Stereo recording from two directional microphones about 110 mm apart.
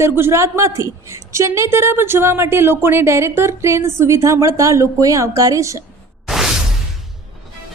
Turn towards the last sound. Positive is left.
turn(degrees=-5)  # may be behind; listen again after turning